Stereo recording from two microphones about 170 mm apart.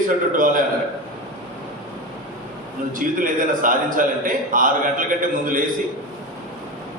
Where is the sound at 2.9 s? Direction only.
55° right (ahead or behind).